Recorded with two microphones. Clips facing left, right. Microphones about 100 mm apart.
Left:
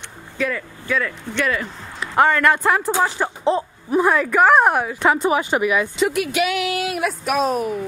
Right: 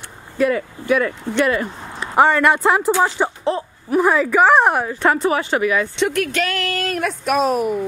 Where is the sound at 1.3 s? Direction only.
20° right (ahead or behind).